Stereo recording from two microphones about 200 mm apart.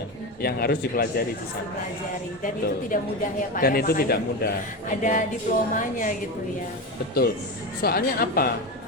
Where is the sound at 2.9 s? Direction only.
40° left (ahead or behind).